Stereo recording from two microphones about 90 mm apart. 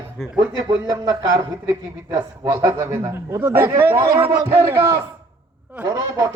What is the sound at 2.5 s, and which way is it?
Speech, 30° right (ahead or behind).